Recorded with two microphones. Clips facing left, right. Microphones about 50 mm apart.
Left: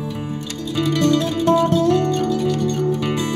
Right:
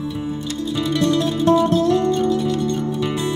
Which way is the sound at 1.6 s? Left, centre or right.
Left.